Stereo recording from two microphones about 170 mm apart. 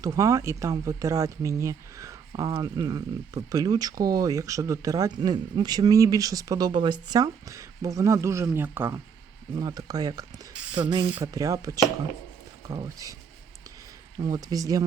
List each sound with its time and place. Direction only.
0.0 s speech: 20° right (ahead or behind)
10.5 s mechanisms: 5° right (ahead or behind)
11.1 s speech: 20° right (ahead or behind)
14.2 s speech: 20° right (ahead or behind)